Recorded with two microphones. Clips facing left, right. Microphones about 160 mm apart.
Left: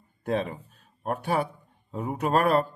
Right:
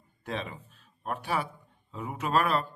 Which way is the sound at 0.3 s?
45° left (ahead or behind).